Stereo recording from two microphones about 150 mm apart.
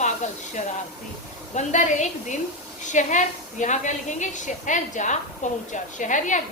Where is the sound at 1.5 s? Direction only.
55° left (ahead or behind).